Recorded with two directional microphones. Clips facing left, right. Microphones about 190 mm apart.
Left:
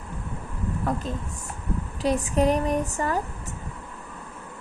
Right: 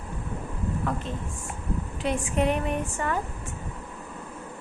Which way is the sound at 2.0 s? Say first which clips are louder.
Left 4 dB; 35° left (ahead or behind).